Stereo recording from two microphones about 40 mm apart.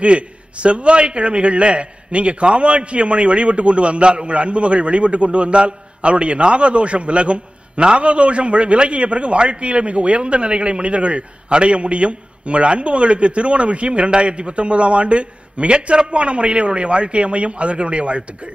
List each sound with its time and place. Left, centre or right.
0.0 s a man's voice: right